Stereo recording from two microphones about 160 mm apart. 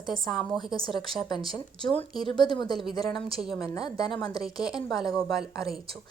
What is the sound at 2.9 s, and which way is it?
A woman's voice, 25° left (ahead or behind).